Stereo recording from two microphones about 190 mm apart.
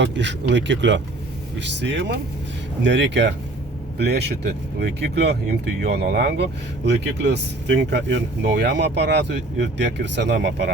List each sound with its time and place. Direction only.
0.0 s speech: 70° right (ahead or behind)